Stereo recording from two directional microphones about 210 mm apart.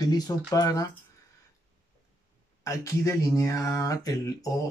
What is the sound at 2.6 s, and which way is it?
Speech, 15° left (ahead or behind).